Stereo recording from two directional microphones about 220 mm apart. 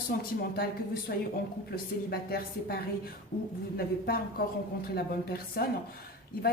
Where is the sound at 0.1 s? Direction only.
45° left (ahead or behind).